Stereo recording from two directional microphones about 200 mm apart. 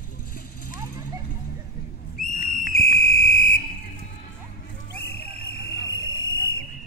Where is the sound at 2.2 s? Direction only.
45° left (ahead or behind).